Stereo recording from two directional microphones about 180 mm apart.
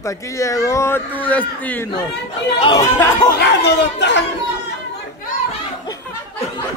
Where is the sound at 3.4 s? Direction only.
70° left (ahead or behind).